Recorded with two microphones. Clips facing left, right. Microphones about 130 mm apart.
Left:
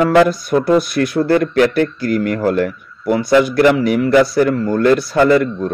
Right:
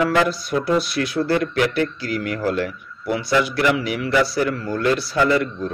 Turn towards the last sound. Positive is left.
turn(degrees=50)  # may be behind; listen again after turning